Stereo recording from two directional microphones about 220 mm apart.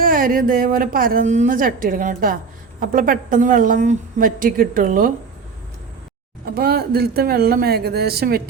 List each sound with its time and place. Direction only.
0.0 s a woman's voice: 40° right (ahead or behind)
6.4 s speech: 45° right (ahead or behind)